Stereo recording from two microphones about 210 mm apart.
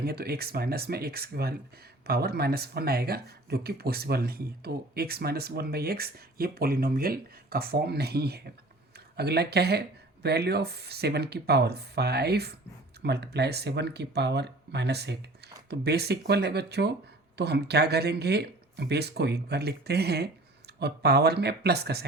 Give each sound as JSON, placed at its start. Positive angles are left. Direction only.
{"t": 0.0, "sound": "speech", "side_deg": -45}